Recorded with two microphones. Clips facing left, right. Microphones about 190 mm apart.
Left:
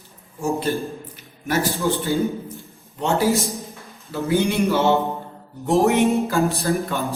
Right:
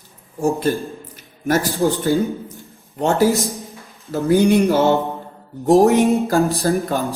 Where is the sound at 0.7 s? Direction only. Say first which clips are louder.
Right 3 dB; 40° right (ahead or behind).